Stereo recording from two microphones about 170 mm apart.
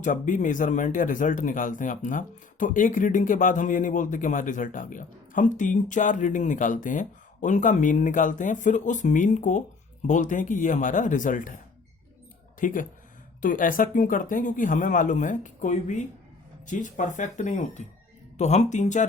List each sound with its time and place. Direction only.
0.0 s speech: 50° left (ahead or behind)
12.5 s speech: 50° left (ahead or behind)